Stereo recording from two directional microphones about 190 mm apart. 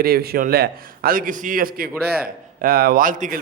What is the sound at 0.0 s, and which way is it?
A man's voice, 55° right (ahead or behind).